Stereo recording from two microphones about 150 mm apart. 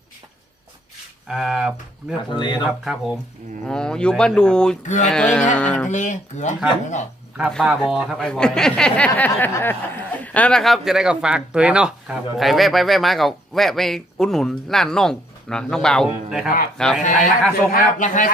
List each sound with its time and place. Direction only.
1.3 s speech: 5° right (ahead or behind)
2.3 s speech: 30° left (ahead or behind)
2.6 s speech: centre (ahead or behind)
5.9 s speech: 55° left (ahead or behind)
7.5 s speech: centre (ahead or behind)
17.7 s speech: 60° left (ahead or behind)